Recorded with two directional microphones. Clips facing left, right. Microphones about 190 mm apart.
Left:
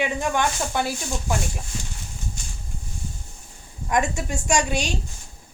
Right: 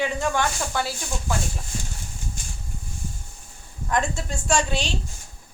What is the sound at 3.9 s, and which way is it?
A woman's voice, 10° left (ahead or behind).